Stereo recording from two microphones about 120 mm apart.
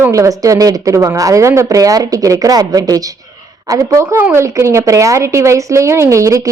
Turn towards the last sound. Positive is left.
turn(degrees=-25)  # may be behind; listen again after turning